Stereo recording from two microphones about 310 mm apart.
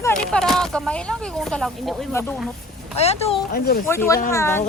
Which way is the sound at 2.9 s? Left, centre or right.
Centre.